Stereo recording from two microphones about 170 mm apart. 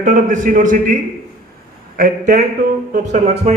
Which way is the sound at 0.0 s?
50° right (ahead or behind).